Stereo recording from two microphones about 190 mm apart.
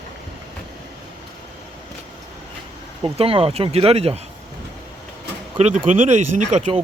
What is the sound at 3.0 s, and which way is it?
Speech, 30° right (ahead or behind).